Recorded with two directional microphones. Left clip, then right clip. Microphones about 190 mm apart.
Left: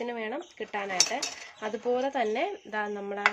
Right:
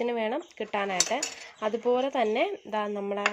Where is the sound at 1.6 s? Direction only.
25° right (ahead or behind).